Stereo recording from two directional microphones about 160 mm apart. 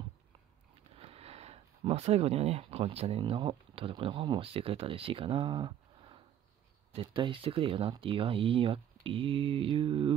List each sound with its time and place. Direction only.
0.9 s speech: 40° right (ahead or behind)